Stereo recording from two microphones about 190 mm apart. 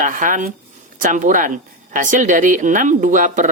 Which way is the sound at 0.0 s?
45° right (ahead or behind).